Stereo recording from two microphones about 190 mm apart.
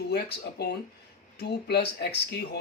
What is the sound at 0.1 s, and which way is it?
Speech, 60° left (ahead or behind).